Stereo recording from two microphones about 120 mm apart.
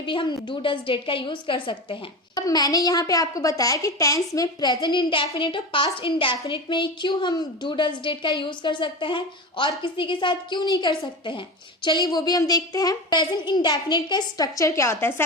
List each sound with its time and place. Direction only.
0.0 s a woman's voice: 45° left (ahead or behind); by 15.1 s 25° left (ahead or behind)